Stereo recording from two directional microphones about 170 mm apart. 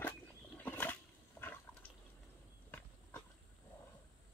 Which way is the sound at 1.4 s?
10° left (ahead or behind).